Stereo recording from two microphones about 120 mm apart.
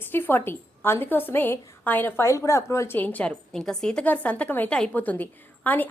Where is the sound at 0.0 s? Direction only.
15° left (ahead or behind).